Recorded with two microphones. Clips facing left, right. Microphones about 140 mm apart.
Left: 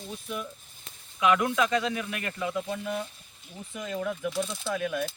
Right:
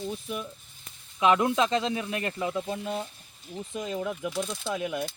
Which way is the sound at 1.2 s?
25° right (ahead or behind).